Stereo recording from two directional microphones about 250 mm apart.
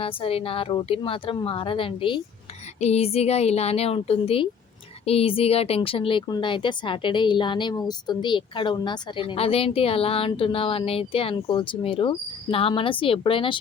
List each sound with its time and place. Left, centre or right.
0.0 s speech: left